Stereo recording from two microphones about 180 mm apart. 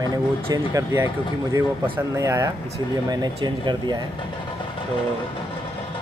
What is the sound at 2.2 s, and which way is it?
Speech, 15° right (ahead or behind).